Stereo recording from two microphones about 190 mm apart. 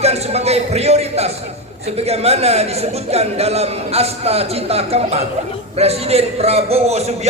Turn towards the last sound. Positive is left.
turn(degrees=-35)  # may be behind; listen again after turning